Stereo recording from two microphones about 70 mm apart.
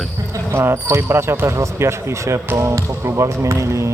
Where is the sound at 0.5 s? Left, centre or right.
Right.